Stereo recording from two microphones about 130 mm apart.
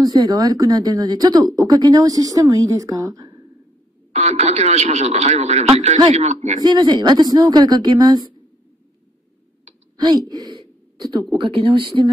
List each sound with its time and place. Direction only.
0.0 s speech: 30° right (ahead or behind)
4.1 s speech: 55° right (ahead or behind)
6.6 s speech: 35° right (ahead or behind)
9.9 s speech: 30° right (ahead or behind)